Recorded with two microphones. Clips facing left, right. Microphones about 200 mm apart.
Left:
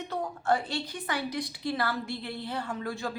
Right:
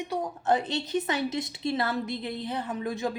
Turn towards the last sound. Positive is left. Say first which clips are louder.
# right 4 dB
turn(degrees=-20)  # may be behind; listen again after turning